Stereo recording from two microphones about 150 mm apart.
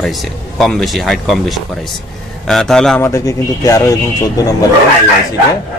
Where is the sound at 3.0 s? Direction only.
20° left (ahead or behind).